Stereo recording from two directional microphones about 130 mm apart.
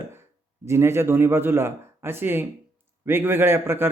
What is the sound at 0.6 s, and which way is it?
A man's voice, 20° right (ahead or behind).